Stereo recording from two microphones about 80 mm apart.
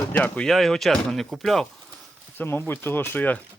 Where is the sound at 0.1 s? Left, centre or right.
Centre.